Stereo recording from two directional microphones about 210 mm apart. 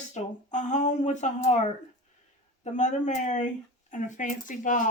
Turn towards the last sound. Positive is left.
turn(degrees=40)  # may be behind; listen again after turning